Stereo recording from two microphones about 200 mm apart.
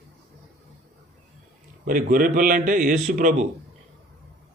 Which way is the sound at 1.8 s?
45° right (ahead or behind).